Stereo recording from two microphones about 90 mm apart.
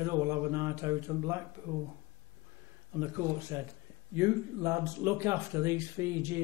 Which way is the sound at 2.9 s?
30° right (ahead or behind).